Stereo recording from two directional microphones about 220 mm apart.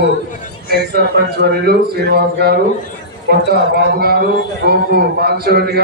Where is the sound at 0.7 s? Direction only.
45° right (ahead or behind).